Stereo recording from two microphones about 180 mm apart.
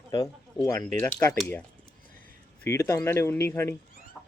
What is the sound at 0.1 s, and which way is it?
Speech, 20° left (ahead or behind).